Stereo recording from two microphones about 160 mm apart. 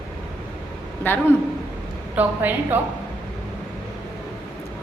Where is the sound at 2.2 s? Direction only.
10° right (ahead or behind).